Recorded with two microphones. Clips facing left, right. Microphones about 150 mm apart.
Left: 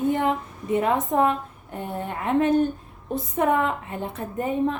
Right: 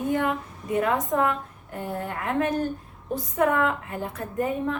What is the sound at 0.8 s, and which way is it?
A woman's voice, 25° left (ahead or behind).